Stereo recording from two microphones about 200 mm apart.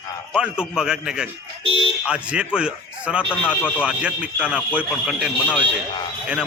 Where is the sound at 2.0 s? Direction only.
5° right (ahead or behind).